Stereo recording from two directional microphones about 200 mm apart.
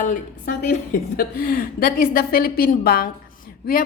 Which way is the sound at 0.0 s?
40° left (ahead or behind).